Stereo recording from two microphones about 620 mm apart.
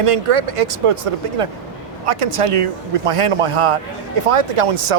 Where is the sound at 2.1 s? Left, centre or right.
Right.